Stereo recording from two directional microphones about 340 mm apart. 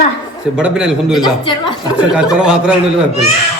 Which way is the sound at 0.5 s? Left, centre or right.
Centre.